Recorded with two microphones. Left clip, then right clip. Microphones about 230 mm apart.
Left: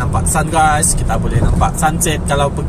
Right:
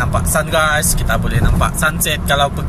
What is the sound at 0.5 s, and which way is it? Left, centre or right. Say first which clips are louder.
Speech: left 3 dB; centre.